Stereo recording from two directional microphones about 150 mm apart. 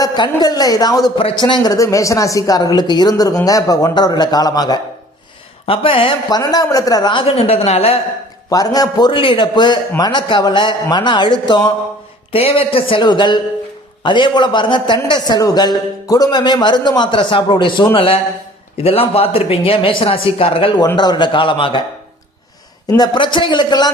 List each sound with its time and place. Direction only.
0.0 s speech: 25° left (ahead or behind)
5.6 s a man's voice: 40° left (ahead or behind)
8.4 s a man's voice: 25° left (ahead or behind)
12.3 s a man's voice: 40° left (ahead or behind)
22.9 s speech: 30° left (ahead or behind)